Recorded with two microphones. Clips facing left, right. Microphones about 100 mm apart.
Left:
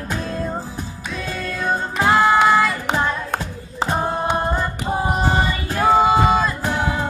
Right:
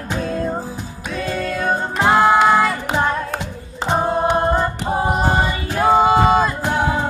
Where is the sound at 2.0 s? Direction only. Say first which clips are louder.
Right 2 dB; 10° right (ahead or behind).